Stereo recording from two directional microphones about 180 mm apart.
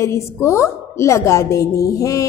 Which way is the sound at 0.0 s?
15° left (ahead or behind).